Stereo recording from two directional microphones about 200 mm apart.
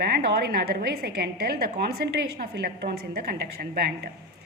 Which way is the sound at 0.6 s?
50° right (ahead or behind).